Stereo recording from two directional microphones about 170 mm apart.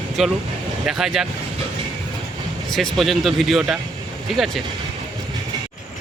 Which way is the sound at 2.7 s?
Centre (ahead or behind).